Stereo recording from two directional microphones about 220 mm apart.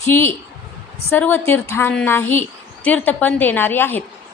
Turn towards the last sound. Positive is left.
turn(degrees=10)  # may be behind; listen again after turning